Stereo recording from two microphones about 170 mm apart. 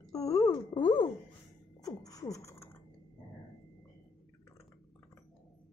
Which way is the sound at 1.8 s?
20° left (ahead or behind).